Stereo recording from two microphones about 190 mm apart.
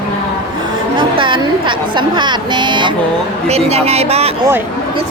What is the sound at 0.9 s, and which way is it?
Speech, 25° right (ahead or behind).